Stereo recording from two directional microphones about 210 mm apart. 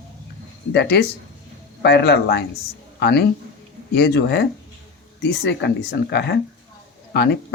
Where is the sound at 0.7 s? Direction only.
50° left (ahead or behind).